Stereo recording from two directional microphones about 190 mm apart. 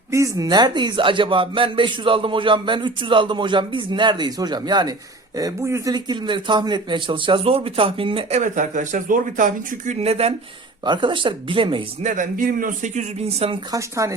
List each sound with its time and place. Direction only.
0.1 s a man's voice: 20° right (ahead or behind)
12.0 s a man's voice: 45° right (ahead or behind)
13.7 s speech: 15° right (ahead or behind)